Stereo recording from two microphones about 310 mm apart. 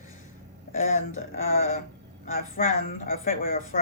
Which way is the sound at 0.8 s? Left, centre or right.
Left.